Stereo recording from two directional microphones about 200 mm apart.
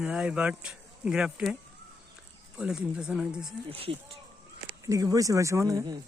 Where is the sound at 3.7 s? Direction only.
30° right (ahead or behind).